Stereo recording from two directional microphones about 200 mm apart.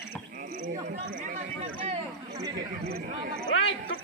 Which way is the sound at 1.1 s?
40° right (ahead or behind).